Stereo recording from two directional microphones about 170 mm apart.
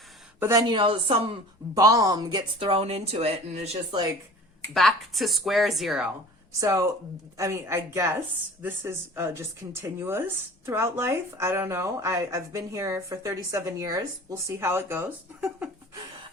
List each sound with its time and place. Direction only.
0.3 s speech: 15° right (ahead or behind)
0.7 s speech: 30° right (ahead or behind)
1.7 s speech: 20° right (ahead or behind); by 4.0 s 40° right (ahead or behind)
4.7 s speech: centre (ahead or behind)
6.6 s speech: 15° right (ahead or behind)